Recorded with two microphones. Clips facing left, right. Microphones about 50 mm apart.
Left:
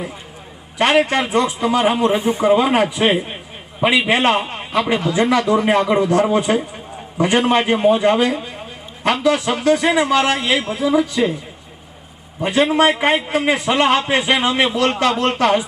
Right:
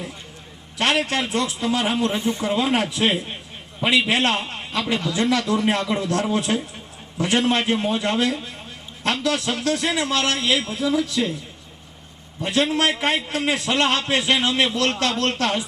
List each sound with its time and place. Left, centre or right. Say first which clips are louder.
0.8 s a man's voice: left 6 dB; centre
12.4 s a man's voice: left 6 dB; centre